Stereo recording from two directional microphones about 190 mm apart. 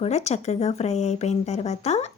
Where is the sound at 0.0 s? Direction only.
35° left (ahead or behind).